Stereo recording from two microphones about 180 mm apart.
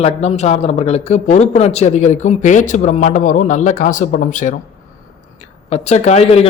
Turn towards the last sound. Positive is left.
turn(degrees=35)  # may be behind; listen again after turning